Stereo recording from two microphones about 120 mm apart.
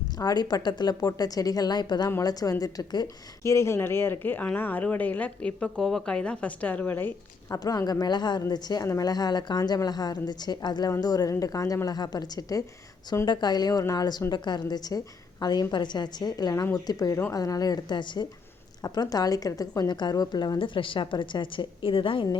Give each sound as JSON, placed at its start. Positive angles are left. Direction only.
{"t": 0.2, "sound": "a woman's voice", "side_deg": 35}
{"t": 3.4, "sound": "speech", "side_deg": 25}
{"t": 7.5, "sound": "a woman's voice", "side_deg": 30}